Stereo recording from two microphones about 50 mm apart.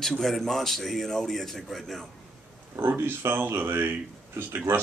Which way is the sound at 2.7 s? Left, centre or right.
Right.